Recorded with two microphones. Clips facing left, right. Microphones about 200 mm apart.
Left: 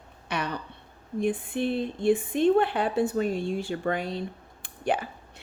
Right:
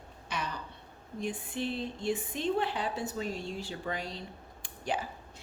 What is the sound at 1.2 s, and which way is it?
A woman's voice, 55° left (ahead or behind).